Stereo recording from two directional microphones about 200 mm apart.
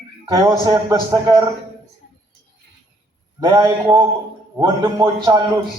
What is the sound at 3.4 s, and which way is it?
A man's voice, 15° right (ahead or behind).